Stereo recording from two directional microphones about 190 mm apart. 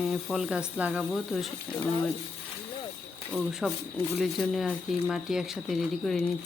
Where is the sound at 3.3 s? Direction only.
Centre (ahead or behind).